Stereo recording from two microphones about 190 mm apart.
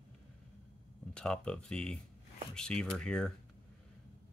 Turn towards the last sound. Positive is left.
turn(degrees=5)  # may be behind; listen again after turning